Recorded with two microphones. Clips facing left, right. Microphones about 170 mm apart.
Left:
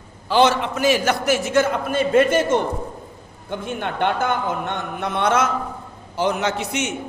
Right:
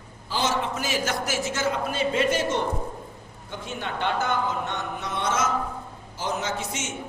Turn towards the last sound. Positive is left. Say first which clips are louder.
# left 7 dB
turn(degrees=65)  # may be behind; listen again after turning